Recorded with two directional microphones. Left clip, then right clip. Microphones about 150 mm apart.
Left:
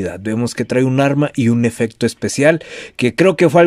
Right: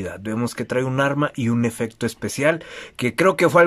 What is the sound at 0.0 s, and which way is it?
Speech, 25° left (ahead or behind).